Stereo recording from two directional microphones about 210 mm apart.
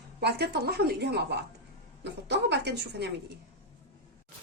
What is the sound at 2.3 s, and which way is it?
Speech, 55° right (ahead or behind).